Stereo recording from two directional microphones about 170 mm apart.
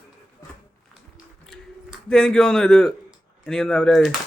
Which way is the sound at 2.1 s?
5° left (ahead or behind).